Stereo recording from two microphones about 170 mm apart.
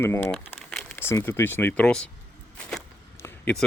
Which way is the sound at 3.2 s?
10° left (ahead or behind).